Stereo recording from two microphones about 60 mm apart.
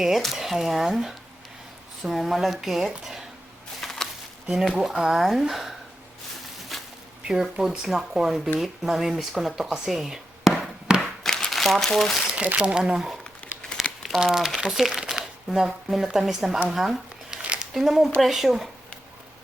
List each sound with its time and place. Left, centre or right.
0.3 s speech: centre
3.8 s a sound: centre
4.6 s speech: centre
7.3 s speech: centre
7.9 s speech: centre
9.7 s a sound: centre
11.2 s crumpling: centre
12.4 s speech: right
14.3 s speech: centre
17.3 s a sound: centre
18.2 s speech: centre